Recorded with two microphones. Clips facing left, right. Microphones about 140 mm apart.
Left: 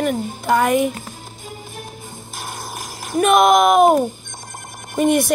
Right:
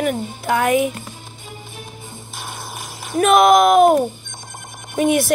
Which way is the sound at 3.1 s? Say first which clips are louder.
Right 1 dB; centre (ahead or behind).